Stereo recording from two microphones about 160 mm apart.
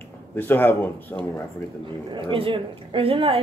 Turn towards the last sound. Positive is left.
turn(degrees=-35)  # may be behind; listen again after turning